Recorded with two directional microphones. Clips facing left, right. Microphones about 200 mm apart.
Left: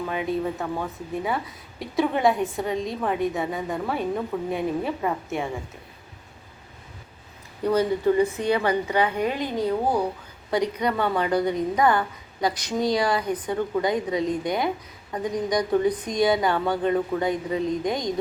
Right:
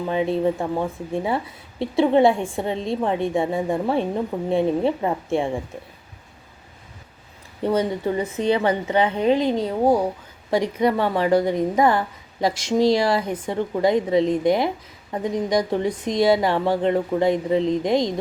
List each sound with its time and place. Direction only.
0.1 s a woman's voice: 30° right (ahead or behind)
7.6 s a woman's voice: 25° right (ahead or behind)